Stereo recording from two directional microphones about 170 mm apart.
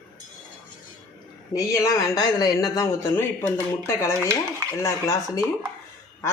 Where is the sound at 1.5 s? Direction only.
20° left (ahead or behind).